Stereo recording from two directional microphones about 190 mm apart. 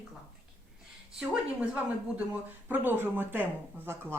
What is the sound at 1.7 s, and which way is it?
Speech, 5° right (ahead or behind).